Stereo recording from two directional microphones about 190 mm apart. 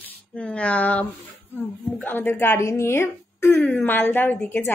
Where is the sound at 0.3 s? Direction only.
5° left (ahead or behind).